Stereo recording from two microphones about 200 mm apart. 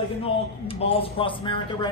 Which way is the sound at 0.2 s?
30° left (ahead or behind).